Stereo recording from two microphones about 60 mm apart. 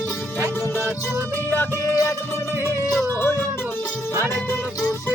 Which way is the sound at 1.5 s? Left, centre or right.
Left.